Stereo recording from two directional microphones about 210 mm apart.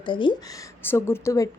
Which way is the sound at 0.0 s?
25° left (ahead or behind).